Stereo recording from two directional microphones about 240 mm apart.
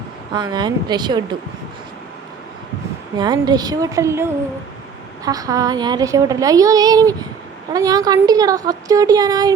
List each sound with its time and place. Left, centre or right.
0.3 s a woman's voice: centre
3.2 s a woman's voice: centre